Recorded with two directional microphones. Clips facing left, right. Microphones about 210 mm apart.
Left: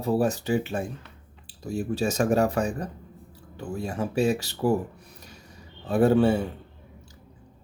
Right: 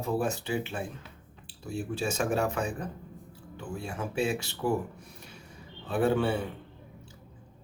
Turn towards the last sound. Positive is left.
turn(degrees=40)  # may be behind; listen again after turning